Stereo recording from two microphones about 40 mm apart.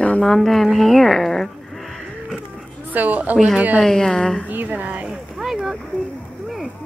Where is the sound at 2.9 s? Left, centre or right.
Right.